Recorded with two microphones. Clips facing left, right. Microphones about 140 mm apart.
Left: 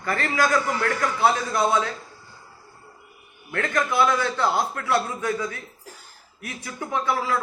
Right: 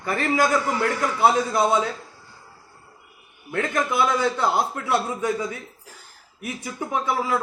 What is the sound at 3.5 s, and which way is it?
A man's voice, 20° right (ahead or behind).